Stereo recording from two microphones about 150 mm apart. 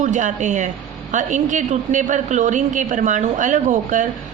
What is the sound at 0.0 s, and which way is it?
A woman's voice, 55° right (ahead or behind).